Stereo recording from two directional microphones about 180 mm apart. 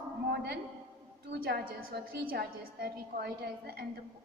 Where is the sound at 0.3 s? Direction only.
60° right (ahead or behind).